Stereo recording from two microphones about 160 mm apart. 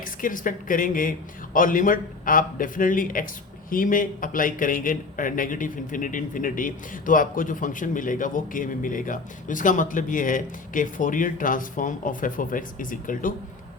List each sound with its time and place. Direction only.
0.0 s speech: 60° left (ahead or behind)